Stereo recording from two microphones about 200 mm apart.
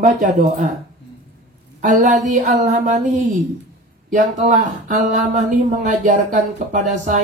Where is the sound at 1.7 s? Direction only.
35° right (ahead or behind).